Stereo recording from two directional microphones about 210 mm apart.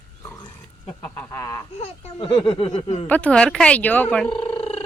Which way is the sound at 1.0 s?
10° left (ahead or behind).